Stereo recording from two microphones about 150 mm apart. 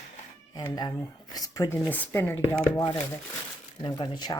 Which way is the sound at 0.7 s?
25° left (ahead or behind).